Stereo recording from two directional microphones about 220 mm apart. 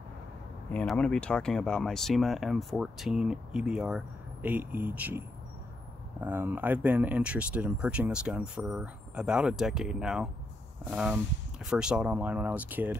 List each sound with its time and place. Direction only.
0.7 s speech: 5° left (ahead or behind)
6.2 s speech: 10° right (ahead or behind)